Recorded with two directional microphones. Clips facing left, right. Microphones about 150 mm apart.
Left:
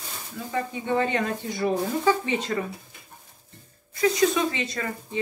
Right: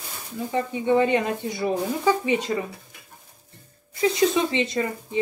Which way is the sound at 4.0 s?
25° right (ahead or behind).